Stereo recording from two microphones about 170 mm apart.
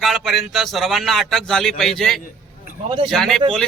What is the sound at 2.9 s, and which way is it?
Speech, 30° right (ahead or behind).